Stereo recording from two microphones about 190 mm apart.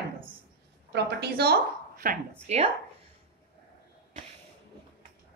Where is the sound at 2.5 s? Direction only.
35° right (ahead or behind).